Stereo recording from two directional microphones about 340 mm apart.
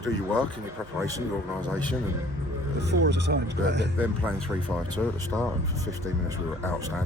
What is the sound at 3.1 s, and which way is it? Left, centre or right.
Speech, right.